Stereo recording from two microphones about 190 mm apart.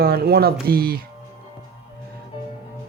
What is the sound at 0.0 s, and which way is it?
Speech, 55° right (ahead or behind).